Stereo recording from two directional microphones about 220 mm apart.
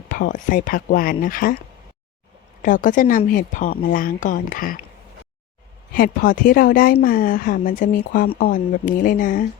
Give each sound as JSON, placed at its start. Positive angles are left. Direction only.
{"t": 0.1, "sound": "speech", "side_deg": 35}
{"t": 5.9, "sound": "speech", "side_deg": 40}